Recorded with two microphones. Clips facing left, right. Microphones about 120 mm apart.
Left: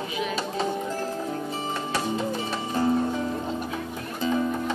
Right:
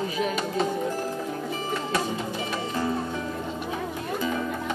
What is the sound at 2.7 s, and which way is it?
Music, 30° left (ahead or behind).